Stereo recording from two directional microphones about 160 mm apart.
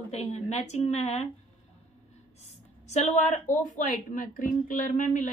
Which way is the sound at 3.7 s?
55° left (ahead or behind).